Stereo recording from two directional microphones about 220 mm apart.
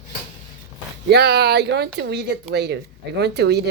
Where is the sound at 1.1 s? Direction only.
50° right (ahead or behind).